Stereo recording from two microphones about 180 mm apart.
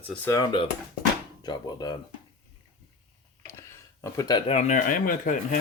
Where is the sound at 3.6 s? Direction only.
15° left (ahead or behind).